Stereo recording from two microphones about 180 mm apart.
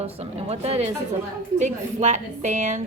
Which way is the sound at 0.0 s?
35° right (ahead or behind).